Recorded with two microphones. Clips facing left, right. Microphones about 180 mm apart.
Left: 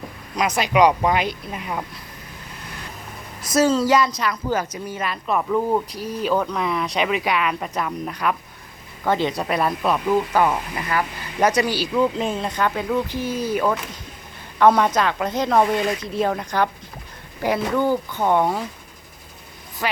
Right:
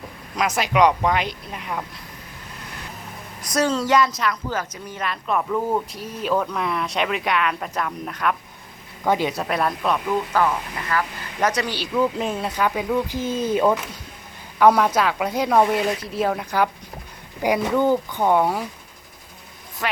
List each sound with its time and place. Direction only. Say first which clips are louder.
0.3 s speech: left 1 dB; centre (ahead or behind)
3.4 s speech: left 4 dB; 5° left (ahead or behind)
4.4 s speech: left 4 dB; 10° left (ahead or behind)
9.0 s speech: even; 10° right (ahead or behind)
10.3 s speech: left 2 dB; 15° left (ahead or behind)
11.9 s speech: even; 5° right (ahead or behind)
13.1 s speech: right 1 dB; 10° left (ahead or behind)
13.5 s speech: right 3 dB; 25° right (ahead or behind)
14.6 s speech: even; 10° right (ahead or behind)
19.8 s speech: left 1 dB; centre (ahead or behind)